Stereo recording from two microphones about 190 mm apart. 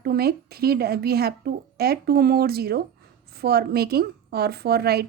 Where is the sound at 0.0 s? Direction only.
55° right (ahead or behind).